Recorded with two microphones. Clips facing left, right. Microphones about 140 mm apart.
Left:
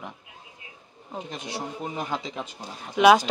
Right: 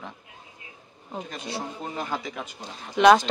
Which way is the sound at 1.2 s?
20° left (ahead or behind).